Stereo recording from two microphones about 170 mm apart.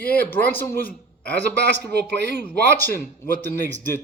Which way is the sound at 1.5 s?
85° right.